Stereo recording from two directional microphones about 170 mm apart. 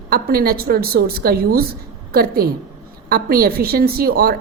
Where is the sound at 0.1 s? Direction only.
60° right (ahead or behind).